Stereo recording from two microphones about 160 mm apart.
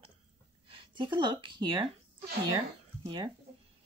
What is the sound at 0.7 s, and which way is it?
Speech, 35° right (ahead or behind).